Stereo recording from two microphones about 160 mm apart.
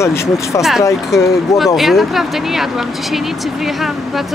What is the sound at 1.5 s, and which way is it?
Speech, centre (ahead or behind).